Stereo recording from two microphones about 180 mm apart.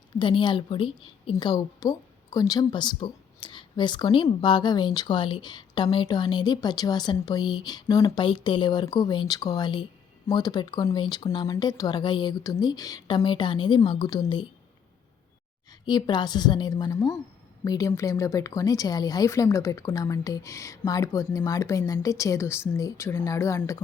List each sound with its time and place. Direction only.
0.2 s a woman's voice: 25° left (ahead or behind)
15.9 s a woman's voice: 25° left (ahead or behind)